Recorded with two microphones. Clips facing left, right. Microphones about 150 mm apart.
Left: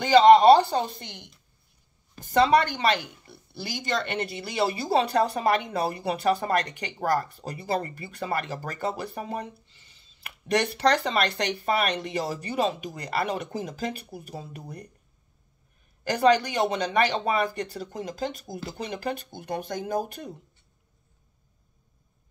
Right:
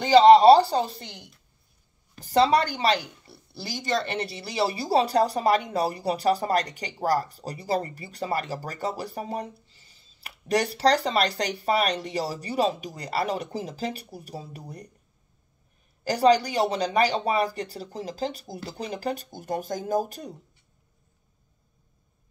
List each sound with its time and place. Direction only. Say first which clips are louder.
0.2 s speech: right 1 dB; 35° right (ahead or behind)
2.2 s speech: even; 35° right (ahead or behind)
16.0 s speech: right 1 dB; 35° right (ahead or behind)